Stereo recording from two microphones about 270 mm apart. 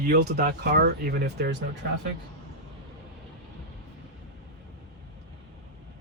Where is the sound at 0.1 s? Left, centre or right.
Right.